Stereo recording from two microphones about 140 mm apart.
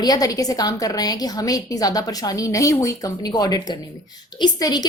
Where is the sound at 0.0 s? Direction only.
25° left (ahead or behind).